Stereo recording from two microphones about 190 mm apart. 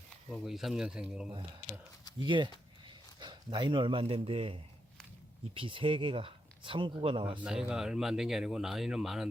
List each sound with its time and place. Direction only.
0.3 s speech: centre (ahead or behind)
2.1 s speech: 25° right (ahead or behind)
7.4 s speech: 5° right (ahead or behind)